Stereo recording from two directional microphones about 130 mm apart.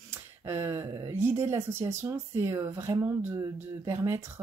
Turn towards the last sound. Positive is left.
turn(degrees=-20)  # may be behind; listen again after turning